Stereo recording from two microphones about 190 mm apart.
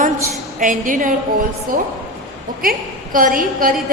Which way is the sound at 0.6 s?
40° right (ahead or behind).